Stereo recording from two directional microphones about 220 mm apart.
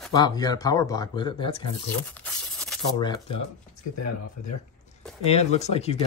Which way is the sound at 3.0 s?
20° left (ahead or behind).